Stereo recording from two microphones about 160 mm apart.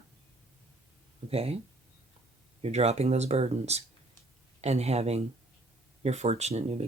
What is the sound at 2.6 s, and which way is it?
Speech, 40° right (ahead or behind).